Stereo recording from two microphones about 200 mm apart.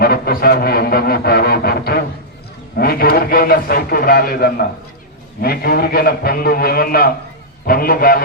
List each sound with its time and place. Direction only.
0.0 s music: 50° left (ahead or behind)
2.7 s a man's voice: 50° left (ahead or behind)